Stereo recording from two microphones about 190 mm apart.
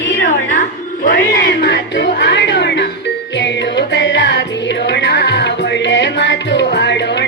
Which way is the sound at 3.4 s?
65° left (ahead or behind).